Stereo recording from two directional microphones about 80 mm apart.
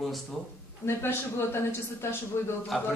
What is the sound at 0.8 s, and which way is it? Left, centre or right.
Speech, left.